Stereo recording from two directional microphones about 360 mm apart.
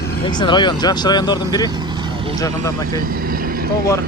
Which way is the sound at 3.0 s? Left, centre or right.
Right.